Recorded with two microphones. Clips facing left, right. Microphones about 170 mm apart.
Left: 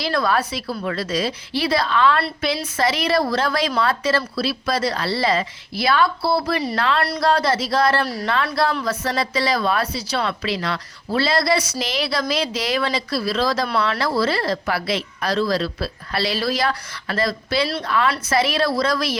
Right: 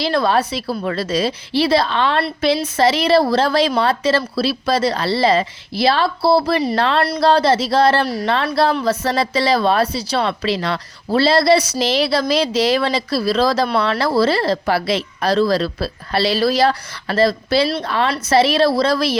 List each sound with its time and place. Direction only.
0.0 s a woman's voice: 25° right (ahead or behind)